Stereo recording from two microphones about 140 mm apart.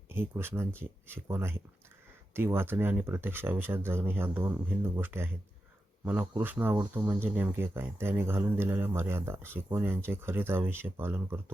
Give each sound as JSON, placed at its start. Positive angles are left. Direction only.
{"t": 0.1, "sound": "speech", "side_deg": -15}